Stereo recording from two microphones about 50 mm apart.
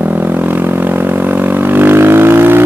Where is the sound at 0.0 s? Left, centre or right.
Right.